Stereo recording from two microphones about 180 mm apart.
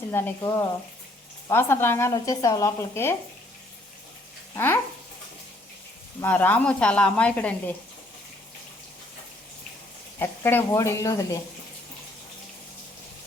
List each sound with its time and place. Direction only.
0.1 s a woman's voice: 15° left (ahead or behind)
4.5 s a woman's voice: 10° left (ahead or behind)
6.2 s a woman's voice: 10° left (ahead or behind)
10.2 s a woman's voice: 15° left (ahead or behind)